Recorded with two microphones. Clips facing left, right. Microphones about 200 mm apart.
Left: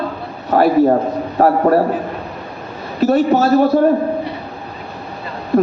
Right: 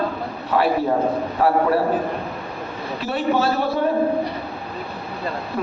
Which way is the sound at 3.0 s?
45° left (ahead or behind).